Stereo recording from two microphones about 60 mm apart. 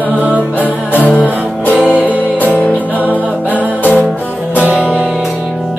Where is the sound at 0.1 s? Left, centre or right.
Right.